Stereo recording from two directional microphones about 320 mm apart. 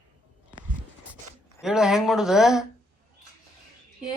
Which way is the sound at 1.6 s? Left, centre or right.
Centre.